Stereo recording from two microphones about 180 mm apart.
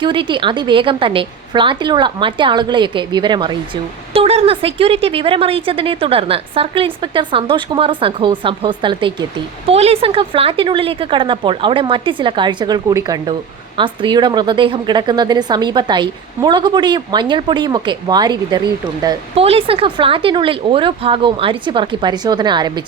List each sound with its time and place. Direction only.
0.0 s a woman's voice: 25° right (ahead or behind)